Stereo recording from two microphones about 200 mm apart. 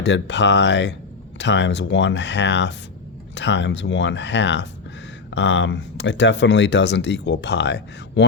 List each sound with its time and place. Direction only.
0.0 s speech: 60° left (ahead or behind)